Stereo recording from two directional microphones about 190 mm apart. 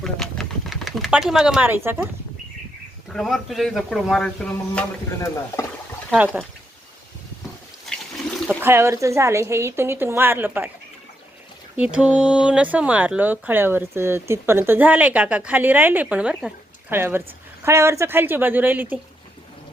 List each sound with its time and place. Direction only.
0.0 s a sound: centre (ahead or behind)
3.1 s speech: centre (ahead or behind)
5.2 s speech: 15° left (ahead or behind)
6.1 s speech: 5° right (ahead or behind)
8.4 s speech: 10° right (ahead or behind)
11.8 s speech: 5° right (ahead or behind)